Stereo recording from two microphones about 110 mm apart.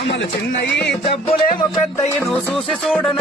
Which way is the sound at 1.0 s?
60° left (ahead or behind).